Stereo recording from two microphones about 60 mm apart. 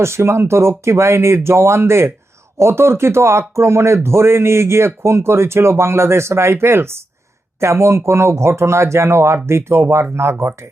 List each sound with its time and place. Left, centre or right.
0.0 s speech: right